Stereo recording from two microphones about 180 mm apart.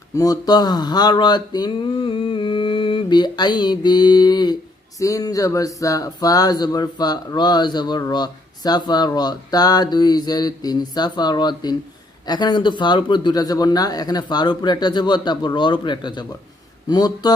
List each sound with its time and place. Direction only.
0.2 s speech: 20° left (ahead or behind)